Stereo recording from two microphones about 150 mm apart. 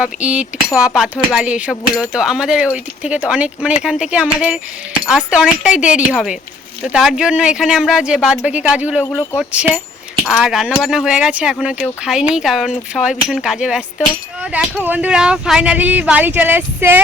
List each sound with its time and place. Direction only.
0.0 s speech: 10° right (ahead or behind)
9.0 s speech: 20° left (ahead or behind)
9.4 s speech: 10° right (ahead or behind)